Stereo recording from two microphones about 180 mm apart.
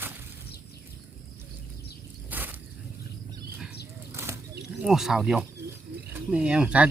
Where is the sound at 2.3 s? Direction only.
10° right (ahead or behind).